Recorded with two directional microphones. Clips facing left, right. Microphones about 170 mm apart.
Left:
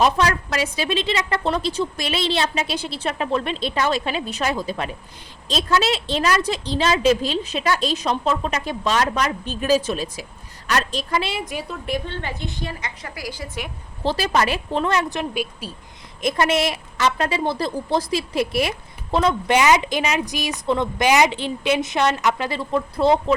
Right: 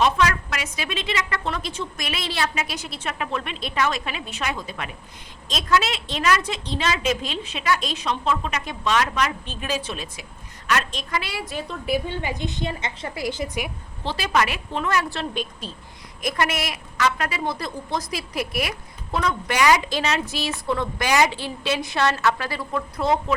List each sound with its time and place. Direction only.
0.0 s a woman's voice: 35° left (ahead or behind); by 11.6 s 20° left (ahead or behind)
11.9 s a woman's voice: 10° right (ahead or behind)
14.0 s a woman's voice: 40° left (ahead or behind); by 15.7 s 10° left (ahead or behind)
16.2 s a woman's voice: 25° left (ahead or behind)